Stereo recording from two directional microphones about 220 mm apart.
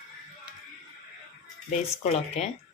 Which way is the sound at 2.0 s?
30° left (ahead or behind).